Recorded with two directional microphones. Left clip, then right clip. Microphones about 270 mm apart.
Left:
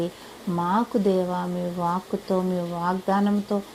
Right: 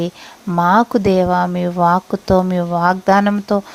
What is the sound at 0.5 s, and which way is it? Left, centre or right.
Speech, right.